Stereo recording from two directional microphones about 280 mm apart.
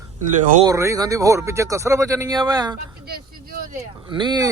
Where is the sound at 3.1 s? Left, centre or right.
Right.